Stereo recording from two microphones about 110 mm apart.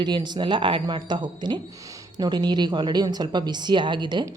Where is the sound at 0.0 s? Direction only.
40° right (ahead or behind).